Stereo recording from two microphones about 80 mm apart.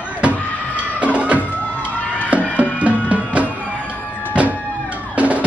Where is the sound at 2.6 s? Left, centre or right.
Centre.